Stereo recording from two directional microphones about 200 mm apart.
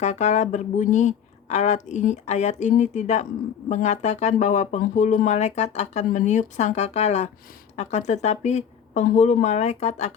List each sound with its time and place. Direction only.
0.0 s speech: 35° left (ahead or behind)